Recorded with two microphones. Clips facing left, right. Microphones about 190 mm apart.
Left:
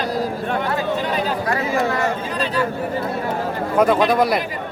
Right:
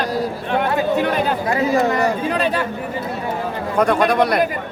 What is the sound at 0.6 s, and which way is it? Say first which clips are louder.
Chatter: right 7 dB; 60° right (ahead or behind).